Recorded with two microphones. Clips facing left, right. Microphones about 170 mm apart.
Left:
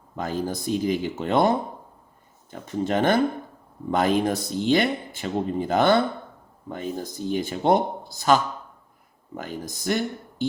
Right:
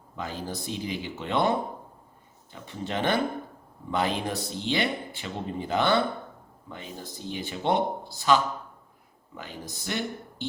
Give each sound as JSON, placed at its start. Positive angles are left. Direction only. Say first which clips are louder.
{"t": 0.2, "sound": "speech", "louder": "left 7 dB", "side_deg": 45}
{"t": 2.5, "sound": "speech", "louder": "left 8 dB", "side_deg": 45}